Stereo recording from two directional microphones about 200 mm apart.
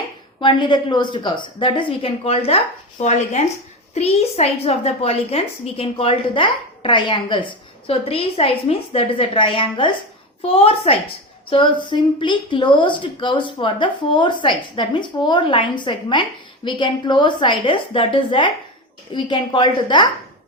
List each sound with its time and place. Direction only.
0.3 s a woman's voice: 20° left (ahead or behind)